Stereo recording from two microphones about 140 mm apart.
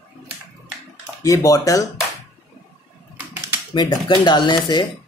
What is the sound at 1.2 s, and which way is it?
Speech, 20° left (ahead or behind).